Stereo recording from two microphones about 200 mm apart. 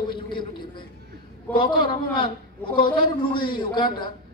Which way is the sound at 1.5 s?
10° left (ahead or behind).